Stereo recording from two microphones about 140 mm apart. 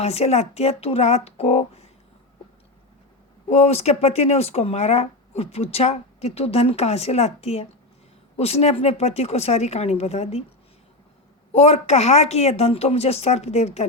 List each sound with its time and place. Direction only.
0.0 s speech: 50° left (ahead or behind)
3.5 s speech: 50° left (ahead or behind)
11.5 s speech: 50° left (ahead or behind)